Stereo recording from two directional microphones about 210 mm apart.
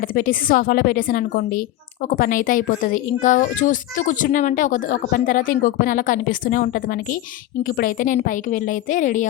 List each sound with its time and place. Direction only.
0.0 s a woman's voice: 40° left (ahead or behind)